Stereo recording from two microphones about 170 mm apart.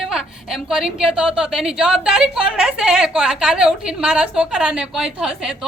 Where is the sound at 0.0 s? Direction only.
5° right (ahead or behind).